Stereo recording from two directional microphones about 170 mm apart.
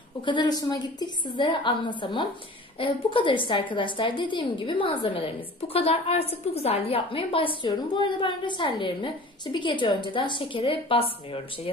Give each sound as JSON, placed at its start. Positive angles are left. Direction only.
{"t": 0.2, "sound": "a woman's voice", "side_deg": 25}